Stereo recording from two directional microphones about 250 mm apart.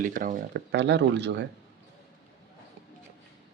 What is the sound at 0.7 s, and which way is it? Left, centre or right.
Speech, right.